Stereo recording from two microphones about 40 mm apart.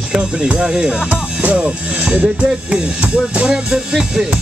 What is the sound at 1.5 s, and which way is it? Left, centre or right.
Speech, right.